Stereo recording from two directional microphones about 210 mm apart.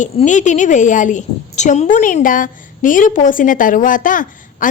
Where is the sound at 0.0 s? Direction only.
35° left (ahead or behind).